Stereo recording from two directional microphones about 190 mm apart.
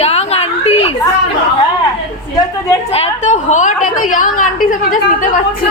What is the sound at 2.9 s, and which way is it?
A woman's voice, 35° left (ahead or behind).